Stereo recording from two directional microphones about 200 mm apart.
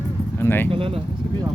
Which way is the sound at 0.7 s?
25° right (ahead or behind).